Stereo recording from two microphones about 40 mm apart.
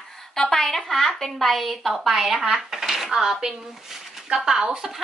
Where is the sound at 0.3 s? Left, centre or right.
Centre.